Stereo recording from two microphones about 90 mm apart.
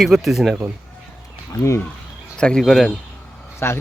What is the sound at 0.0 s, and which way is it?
Speech, centre (ahead or behind).